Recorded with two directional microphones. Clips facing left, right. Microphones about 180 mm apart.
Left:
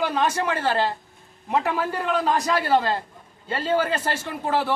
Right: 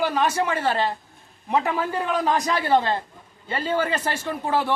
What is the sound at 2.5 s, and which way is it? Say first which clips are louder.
Speech: even; 15° right (ahead or behind).